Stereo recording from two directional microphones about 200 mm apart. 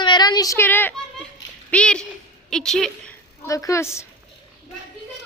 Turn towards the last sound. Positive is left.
turn(degrees=15)  # may be behind; listen again after turning